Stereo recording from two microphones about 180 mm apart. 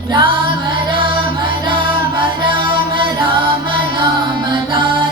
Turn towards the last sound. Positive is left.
turn(degrees=-25)  # may be behind; listen again after turning